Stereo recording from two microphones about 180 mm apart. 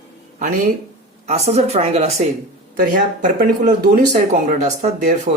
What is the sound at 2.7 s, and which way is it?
Speech, 50° right (ahead or behind).